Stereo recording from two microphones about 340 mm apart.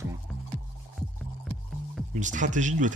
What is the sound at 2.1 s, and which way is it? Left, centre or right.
Speech, right.